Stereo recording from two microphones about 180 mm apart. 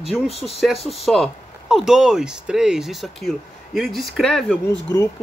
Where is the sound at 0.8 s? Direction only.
Centre (ahead or behind).